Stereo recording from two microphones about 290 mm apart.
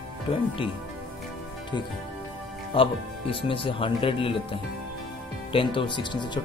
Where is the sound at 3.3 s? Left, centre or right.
Centre.